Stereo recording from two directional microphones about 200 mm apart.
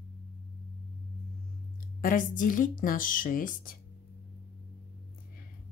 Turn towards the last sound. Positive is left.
turn(degrees=45)  # may be behind; listen again after turning